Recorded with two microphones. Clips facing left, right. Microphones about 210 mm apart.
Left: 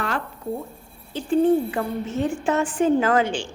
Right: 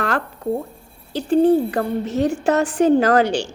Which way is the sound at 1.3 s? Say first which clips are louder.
Right 3 dB; 35° right (ahead or behind).